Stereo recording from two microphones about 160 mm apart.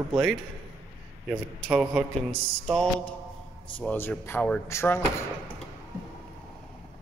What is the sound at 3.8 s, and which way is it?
Speech, 10° left (ahead or behind).